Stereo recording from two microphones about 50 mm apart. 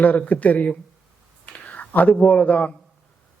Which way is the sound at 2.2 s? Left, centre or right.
Left.